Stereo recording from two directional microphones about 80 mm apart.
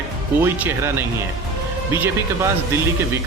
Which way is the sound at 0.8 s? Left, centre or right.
Right.